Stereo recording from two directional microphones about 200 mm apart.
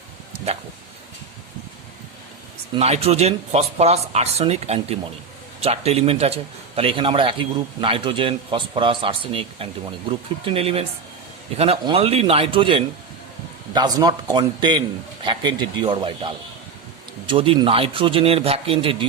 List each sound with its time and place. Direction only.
2.7 s a man's voice: 30° right (ahead or behind)